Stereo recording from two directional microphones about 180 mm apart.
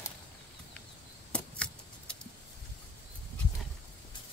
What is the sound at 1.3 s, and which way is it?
Keys jangling, 5° left (ahead or behind).